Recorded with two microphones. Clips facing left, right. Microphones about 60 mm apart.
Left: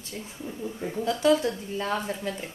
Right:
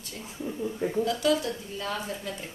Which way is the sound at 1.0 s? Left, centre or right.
Left.